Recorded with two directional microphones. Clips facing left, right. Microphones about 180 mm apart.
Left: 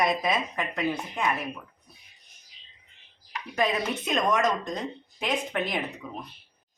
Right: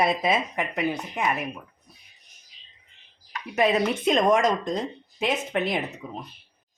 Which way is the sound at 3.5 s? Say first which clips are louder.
Right 5 dB; 25° right (ahead or behind).